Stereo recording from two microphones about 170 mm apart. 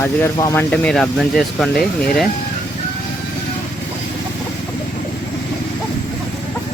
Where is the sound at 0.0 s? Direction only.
15° left (ahead or behind).